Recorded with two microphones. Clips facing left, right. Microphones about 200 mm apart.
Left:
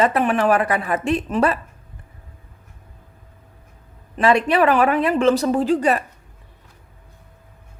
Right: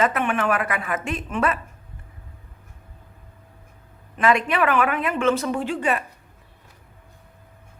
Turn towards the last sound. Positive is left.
turn(degrees=40)  # may be behind; listen again after turning